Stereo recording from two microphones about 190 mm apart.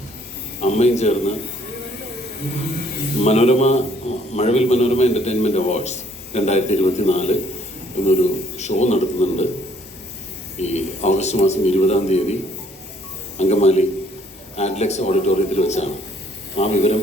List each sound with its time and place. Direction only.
0.6 s a man's voice: 35° left (ahead or behind)
3.2 s a man's voice: 35° left (ahead or behind)
10.6 s a man's voice: 35° left (ahead or behind)